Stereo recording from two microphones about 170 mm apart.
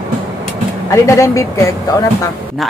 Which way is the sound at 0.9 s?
20° left (ahead or behind).